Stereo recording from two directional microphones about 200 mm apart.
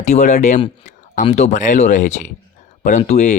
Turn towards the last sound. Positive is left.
turn(degrees=35)  # may be behind; listen again after turning